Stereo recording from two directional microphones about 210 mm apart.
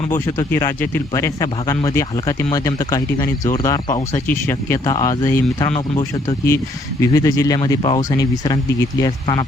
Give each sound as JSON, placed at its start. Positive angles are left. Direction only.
{"t": 0.3, "sound": "speech", "side_deg": 15}